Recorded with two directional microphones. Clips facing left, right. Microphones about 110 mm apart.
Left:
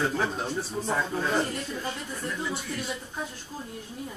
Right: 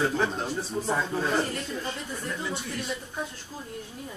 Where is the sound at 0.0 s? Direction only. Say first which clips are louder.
Right 1 dB; centre (ahead or behind).